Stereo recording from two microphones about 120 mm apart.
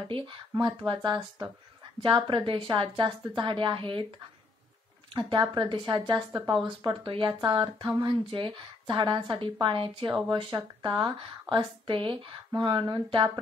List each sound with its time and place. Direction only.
0.1 s a woman's voice: 40° right (ahead or behind)
5.1 s a woman's voice: 40° right (ahead or behind)